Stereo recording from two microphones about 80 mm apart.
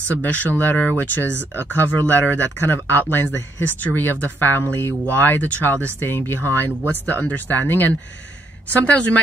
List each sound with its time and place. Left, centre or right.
0.1 s speech: centre